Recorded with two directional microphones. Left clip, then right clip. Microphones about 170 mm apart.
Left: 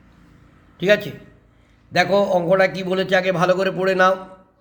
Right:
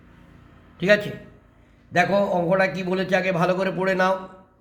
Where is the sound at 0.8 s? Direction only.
20° left (ahead or behind).